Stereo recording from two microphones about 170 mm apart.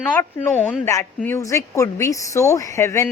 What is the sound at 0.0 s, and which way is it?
A woman's voice, 10° left (ahead or behind).